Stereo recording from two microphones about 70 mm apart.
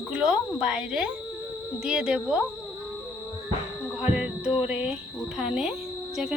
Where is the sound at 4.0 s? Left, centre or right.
Centre.